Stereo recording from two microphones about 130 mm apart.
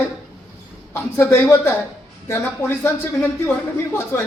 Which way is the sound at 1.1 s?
20° left (ahead or behind).